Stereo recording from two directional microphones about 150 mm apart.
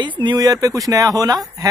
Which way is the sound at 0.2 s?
30° right (ahead or behind).